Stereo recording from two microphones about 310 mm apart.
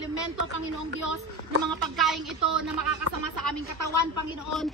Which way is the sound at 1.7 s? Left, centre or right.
Centre.